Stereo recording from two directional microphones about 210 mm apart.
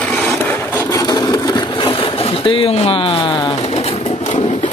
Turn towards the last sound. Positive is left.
turn(degrees=30)  # may be behind; listen again after turning